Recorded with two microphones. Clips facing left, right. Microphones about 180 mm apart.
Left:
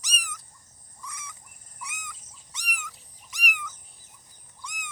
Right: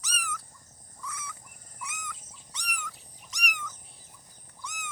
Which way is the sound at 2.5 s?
10° left (ahead or behind).